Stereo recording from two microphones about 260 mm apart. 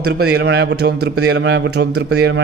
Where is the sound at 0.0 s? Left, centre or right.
Right.